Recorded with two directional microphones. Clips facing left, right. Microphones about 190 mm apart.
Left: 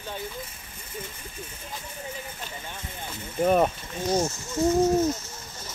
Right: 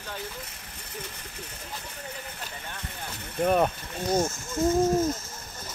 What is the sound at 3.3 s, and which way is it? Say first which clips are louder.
Speech: left 2 dB; 5° left (ahead or behind).